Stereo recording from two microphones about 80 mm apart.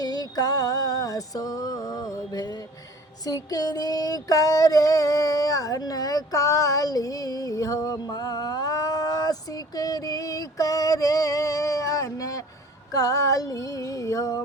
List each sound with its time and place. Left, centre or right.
0.0 s music: left
3.2 s a sound: left
12.9 s female singing: left